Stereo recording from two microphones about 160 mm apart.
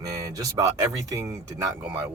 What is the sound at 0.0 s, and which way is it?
Speech, 25° right (ahead or behind).